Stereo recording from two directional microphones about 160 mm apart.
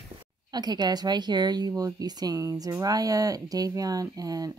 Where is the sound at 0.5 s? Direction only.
25° right (ahead or behind).